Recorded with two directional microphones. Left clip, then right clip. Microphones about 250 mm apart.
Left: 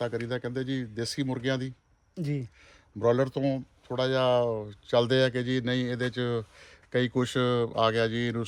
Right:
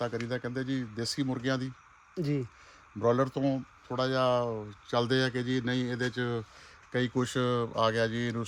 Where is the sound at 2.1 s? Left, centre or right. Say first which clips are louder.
Right 2 dB; right.